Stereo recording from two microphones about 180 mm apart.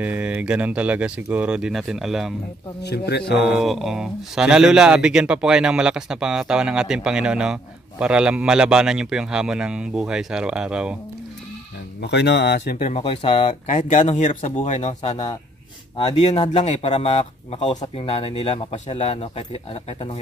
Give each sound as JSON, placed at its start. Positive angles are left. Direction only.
{"t": 0.0, "sound": "speech", "side_deg": -10}
{"t": 2.8, "sound": "speech", "side_deg": 65}
{"t": 3.4, "sound": "speech", "side_deg": 0}
{"t": 12.0, "sound": "speech", "side_deg": 70}
{"t": 12.7, "sound": "speech", "side_deg": 35}